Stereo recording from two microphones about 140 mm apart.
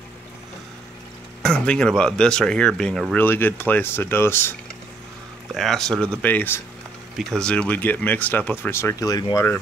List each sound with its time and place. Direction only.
1.4 s speech: 5° left (ahead or behind)
5.5 s speech: centre (ahead or behind); by 9.6 s 20° left (ahead or behind)